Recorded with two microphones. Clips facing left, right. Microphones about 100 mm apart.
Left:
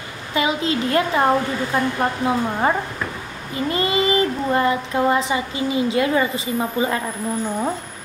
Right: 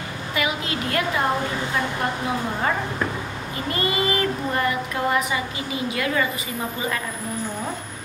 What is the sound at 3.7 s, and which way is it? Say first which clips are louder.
Speech: left 4 dB; 25° left (ahead or behind).